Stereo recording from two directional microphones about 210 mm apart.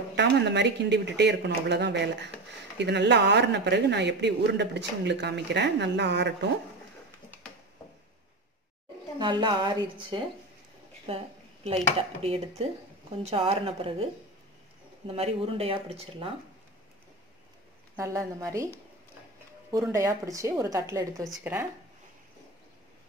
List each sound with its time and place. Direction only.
0.1 s speech: 55° right (ahead or behind)
9.2 s speech: 20° right (ahead or behind)
15.0 s speech: 30° right (ahead or behind)
17.9 s a woman's voice: 15° right (ahead or behind)
19.8 s a woman's voice: 15° right (ahead or behind)